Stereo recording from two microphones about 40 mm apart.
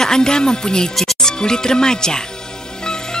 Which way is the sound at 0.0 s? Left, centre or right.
Centre.